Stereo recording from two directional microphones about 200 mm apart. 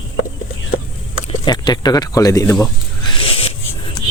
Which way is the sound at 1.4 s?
20° left (ahead or behind).